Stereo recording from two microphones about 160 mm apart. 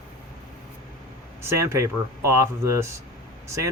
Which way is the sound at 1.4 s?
15° right (ahead or behind).